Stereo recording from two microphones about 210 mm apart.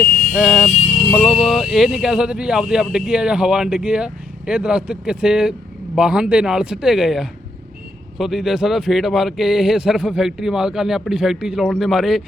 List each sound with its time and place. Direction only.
0.0 s vehicle: 40° left (ahead or behind)
0.3 s speech: centre (ahead or behind)